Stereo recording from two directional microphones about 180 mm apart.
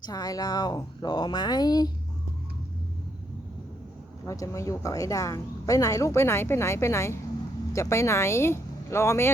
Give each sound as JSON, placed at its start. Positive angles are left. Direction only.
{"t": 0.0, "sound": "speech", "side_deg": 20}
{"t": 4.3, "sound": "a woman's voice", "side_deg": 15}